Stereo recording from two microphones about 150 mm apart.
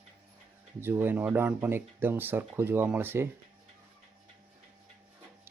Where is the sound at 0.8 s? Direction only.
15° right (ahead or behind).